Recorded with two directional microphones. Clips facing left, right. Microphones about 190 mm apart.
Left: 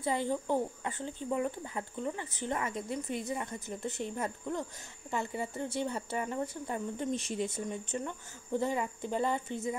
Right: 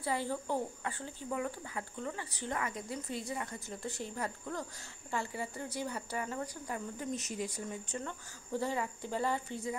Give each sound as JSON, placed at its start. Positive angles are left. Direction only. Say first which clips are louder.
{"t": 0.0, "sound": "speech", "louder": "left 3 dB", "side_deg": 20}